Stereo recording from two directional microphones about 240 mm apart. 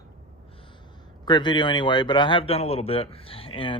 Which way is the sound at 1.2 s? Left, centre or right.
Centre.